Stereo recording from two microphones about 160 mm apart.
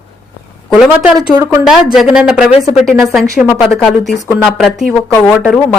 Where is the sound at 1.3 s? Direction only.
20° right (ahead or behind).